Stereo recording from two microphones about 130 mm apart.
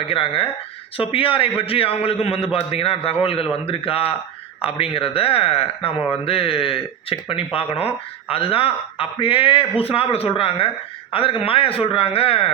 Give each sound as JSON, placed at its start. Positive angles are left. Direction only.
{"t": 0.0, "sound": "speech", "side_deg": 45}